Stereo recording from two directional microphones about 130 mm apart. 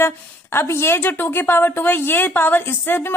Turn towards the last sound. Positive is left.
turn(degrees=15)  # may be behind; listen again after turning